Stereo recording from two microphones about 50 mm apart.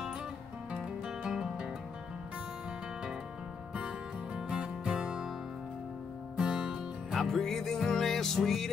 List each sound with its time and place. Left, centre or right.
0.7 s music: centre
3.7 s music: centre
6.3 s music: centre
7.2 s music: centre